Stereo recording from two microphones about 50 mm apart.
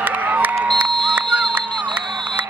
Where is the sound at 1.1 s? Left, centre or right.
Right.